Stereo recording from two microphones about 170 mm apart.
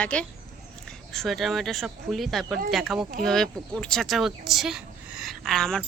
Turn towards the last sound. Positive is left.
turn(degrees=0)  # may be behind; listen again after turning